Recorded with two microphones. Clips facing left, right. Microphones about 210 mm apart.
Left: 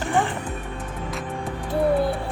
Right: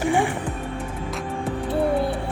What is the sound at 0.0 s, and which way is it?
Music, 10° right (ahead or behind).